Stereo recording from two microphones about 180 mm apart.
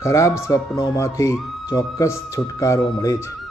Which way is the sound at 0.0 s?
15° left (ahead or behind).